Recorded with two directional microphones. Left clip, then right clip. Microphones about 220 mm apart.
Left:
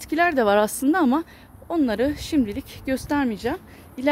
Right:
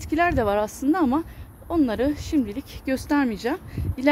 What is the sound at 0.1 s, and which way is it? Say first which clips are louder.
A woman's voice: left 3 dB; 20° left (ahead or behind).